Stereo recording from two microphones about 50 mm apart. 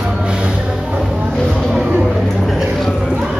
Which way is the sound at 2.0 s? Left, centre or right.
Centre.